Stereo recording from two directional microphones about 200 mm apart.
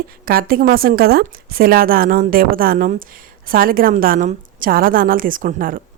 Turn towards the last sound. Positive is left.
turn(degrees=-45)  # may be behind; listen again after turning